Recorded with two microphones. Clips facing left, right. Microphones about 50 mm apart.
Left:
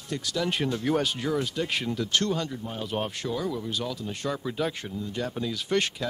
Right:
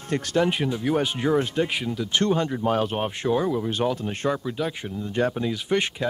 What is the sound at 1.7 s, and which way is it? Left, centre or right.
Speech, centre.